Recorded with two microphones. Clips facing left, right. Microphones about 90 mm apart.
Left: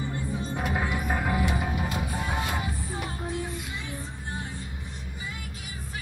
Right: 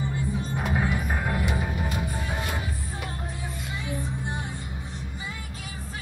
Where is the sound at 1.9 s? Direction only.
20° left (ahead or behind).